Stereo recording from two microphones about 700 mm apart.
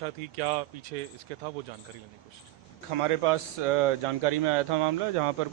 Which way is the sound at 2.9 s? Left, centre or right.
Right.